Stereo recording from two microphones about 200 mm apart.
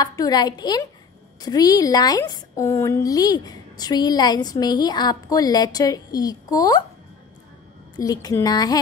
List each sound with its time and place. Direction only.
0.0 s a woman's voice: 20° left (ahead or behind)
8.0 s a woman's voice: 15° left (ahead or behind)